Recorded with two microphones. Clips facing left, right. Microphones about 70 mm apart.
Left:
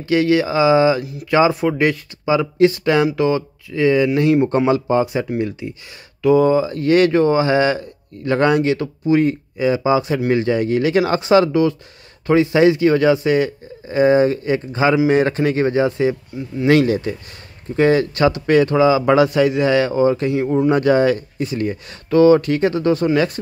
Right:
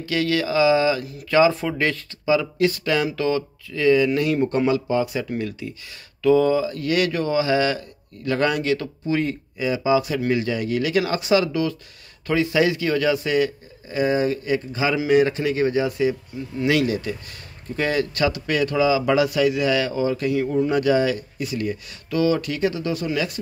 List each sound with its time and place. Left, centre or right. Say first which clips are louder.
0.0 s a man's voice: left 7 dB; left
12.3 s a man's voice: left 6 dB; left